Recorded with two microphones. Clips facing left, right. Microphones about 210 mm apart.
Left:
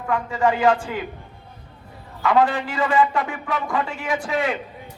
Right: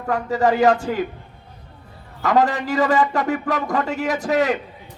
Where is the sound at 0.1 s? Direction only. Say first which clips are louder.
Right 2 dB; 40° right (ahead or behind).